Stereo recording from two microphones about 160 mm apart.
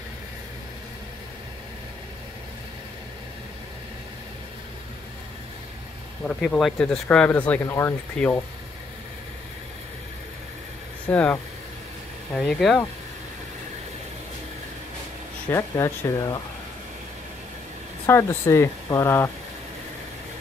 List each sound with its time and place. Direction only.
6.2 s speech: centre (ahead or behind)
11.1 s speech: 10° left (ahead or behind)
12.4 s speech: 5° left (ahead or behind)
15.5 s speech: 20° left (ahead or behind)
18.0 s speech: 15° left (ahead or behind)